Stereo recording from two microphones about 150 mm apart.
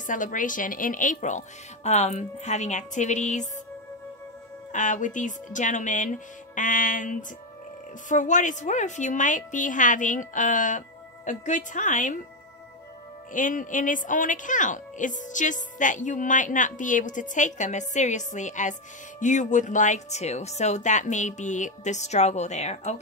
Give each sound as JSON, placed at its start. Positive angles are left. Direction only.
{"t": 0.0, "sound": "a woman's voice", "side_deg": 60}
{"t": 4.7, "sound": "a woman's voice", "side_deg": 55}
{"t": 13.3, "sound": "a woman's voice", "side_deg": 60}